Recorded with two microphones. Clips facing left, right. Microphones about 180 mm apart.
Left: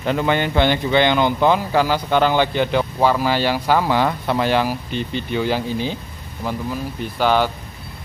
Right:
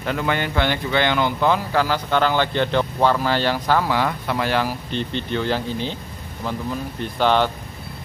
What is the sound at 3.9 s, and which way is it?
Speech, 25° left (ahead or behind).